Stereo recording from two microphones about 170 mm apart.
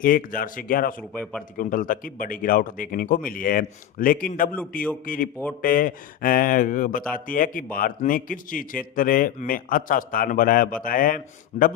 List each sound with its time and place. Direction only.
0.0 s a man's voice: 55° left (ahead or behind)
1.2 s speech: 5° left (ahead or behind)
1.5 s a man's voice: 55° left (ahead or behind)